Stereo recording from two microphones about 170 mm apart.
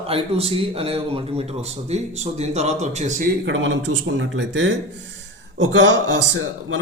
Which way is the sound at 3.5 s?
90° right.